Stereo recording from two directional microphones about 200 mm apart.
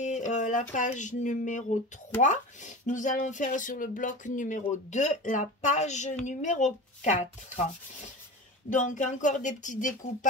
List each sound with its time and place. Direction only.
0.0 s a sound: 40° left (ahead or behind)
2.2 s speech: 40° left (ahead or behind)
8.6 s speech: 40° left (ahead or behind)